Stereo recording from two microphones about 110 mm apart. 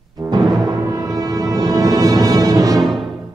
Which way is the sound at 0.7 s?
35° right (ahead or behind).